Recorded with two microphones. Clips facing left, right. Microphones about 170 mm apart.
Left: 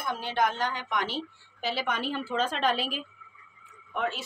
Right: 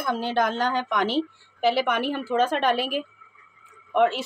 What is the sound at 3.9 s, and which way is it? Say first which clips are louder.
Speech: right 11 dB; 70° right (ahead or behind).